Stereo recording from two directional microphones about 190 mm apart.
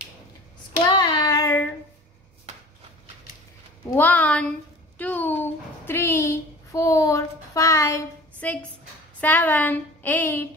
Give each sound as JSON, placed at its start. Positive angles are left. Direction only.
{"t": 0.9, "sound": "child singing", "side_deg": 25}
{"t": 3.9, "sound": "a woman's voice", "side_deg": 10}